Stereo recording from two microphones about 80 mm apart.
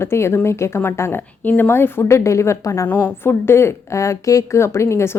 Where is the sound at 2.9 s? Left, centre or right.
Centre.